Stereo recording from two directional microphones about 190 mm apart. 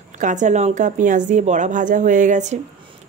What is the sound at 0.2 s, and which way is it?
Speech, 40° right (ahead or behind).